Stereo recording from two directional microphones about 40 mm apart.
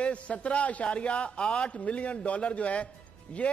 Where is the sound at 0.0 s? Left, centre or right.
Left.